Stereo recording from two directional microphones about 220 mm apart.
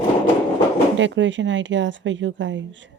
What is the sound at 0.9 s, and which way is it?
Speech, 55° right (ahead or behind).